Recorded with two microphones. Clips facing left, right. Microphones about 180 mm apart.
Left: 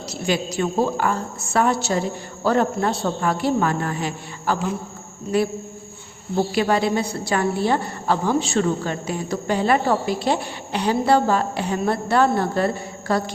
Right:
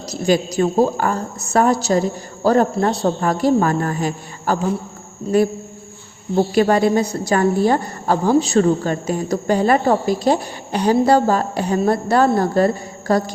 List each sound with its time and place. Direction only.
0.1 s a woman's voice: 40° right (ahead or behind)
6.5 s a woman's voice: 45° right (ahead or behind)